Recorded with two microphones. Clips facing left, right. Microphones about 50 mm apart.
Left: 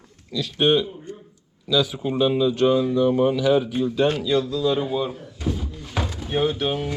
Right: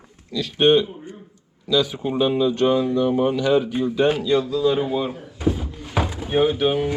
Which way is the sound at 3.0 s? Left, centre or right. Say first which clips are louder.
Even; centre.